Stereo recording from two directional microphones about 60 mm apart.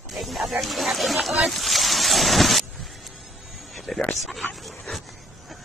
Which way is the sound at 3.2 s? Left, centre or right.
Centre.